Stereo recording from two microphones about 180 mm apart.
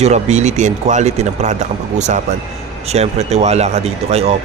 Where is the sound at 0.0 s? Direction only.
40° right (ahead or behind).